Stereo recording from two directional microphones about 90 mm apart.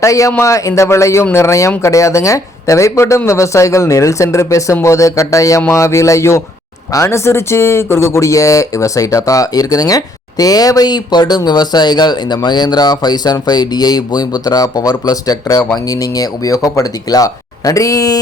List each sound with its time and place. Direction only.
0.0 s speech: 35° left (ahead or behind)